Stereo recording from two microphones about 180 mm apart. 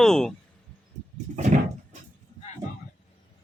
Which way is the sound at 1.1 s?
40° right (ahead or behind).